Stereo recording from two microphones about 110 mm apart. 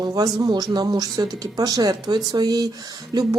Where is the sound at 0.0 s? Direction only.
35° right (ahead or behind).